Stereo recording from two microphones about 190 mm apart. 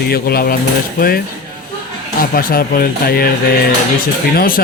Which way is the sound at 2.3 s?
50° left (ahead or behind).